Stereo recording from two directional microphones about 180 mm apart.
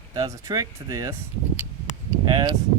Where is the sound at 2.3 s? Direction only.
25° right (ahead or behind).